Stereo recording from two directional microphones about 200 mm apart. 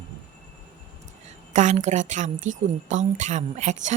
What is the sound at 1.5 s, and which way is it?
A woman's voice, 35° right (ahead or behind).